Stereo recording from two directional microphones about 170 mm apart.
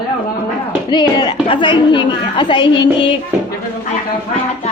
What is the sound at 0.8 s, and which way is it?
A woman's voice, 25° left (ahead or behind).